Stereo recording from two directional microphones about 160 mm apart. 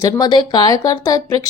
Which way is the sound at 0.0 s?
25° left (ahead or behind).